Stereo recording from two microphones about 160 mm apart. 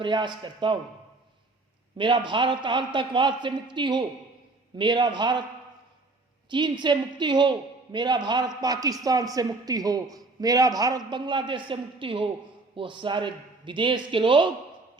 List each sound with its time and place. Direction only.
0.0 s a man's voice: 30° right (ahead or behind)
2.0 s a man's voice: 30° right (ahead or behind)
6.5 s a man's voice: 30° right (ahead or behind)